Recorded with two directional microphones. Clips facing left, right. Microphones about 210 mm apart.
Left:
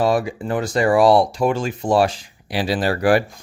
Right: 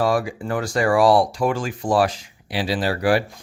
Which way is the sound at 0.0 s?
20° left (ahead or behind).